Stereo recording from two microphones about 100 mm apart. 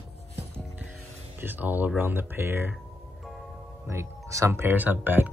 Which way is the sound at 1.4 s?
20° right (ahead or behind).